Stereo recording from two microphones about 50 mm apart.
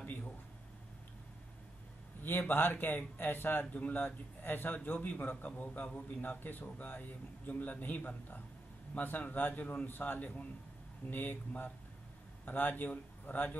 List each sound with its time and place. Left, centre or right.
2.2 s speech: left
4.7 s speech: left